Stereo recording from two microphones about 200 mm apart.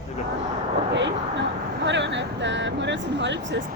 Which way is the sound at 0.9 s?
65° right (ahead or behind).